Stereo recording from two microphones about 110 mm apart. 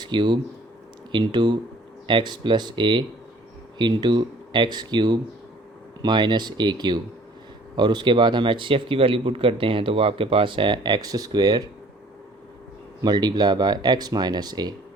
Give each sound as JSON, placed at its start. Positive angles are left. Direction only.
{"t": 0.0, "sound": "speech", "side_deg": -45}
{"t": 13.0, "sound": "speech", "side_deg": -40}